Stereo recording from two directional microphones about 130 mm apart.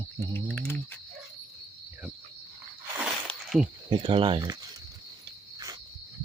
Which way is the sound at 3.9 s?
40° right (ahead or behind).